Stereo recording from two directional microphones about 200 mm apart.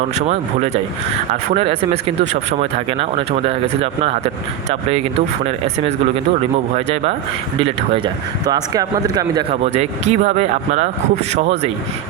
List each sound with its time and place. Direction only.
0.3 s speech: 35° right (ahead or behind)
4.7 s speech: 30° right (ahead or behind)
6.7 s speech: 30° right (ahead or behind)
7.6 s speech: 20° right (ahead or behind)
9.6 s speech: 35° right (ahead or behind)